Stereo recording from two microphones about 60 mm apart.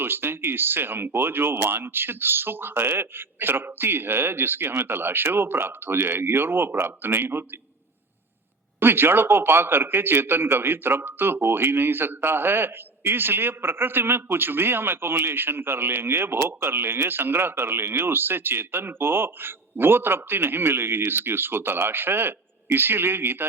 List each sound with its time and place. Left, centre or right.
0.0 s a man's voice: right
8.8 s a man's voice: right